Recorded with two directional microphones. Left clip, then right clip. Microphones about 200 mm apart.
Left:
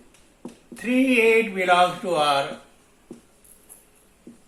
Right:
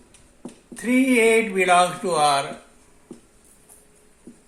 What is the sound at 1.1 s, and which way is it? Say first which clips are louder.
A man's voice: even; 35° right (ahead or behind).